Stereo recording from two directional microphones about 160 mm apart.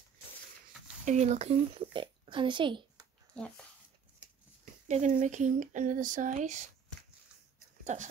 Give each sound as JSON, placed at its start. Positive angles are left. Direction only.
{"t": 1.0, "sound": "a child's voice", "side_deg": -45}
{"t": 4.8, "sound": "speech", "side_deg": -50}
{"t": 7.8, "sound": "speech", "side_deg": -50}